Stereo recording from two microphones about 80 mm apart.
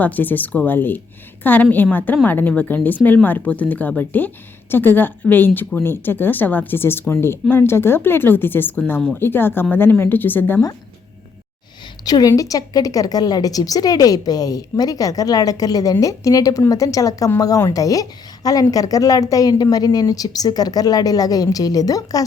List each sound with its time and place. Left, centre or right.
0.0 s a woman's voice: left
12.0 s a woman's voice: left